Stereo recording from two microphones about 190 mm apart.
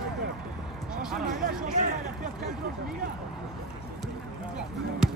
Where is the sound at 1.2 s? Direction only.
45° right (ahead or behind).